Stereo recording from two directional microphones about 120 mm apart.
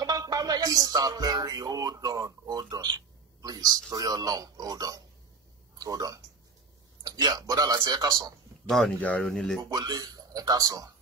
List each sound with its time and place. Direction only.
0.0 s speech: 30° right (ahead or behind)
8.6 s speech: centre (ahead or behind)
9.7 s speech: 35° right (ahead or behind)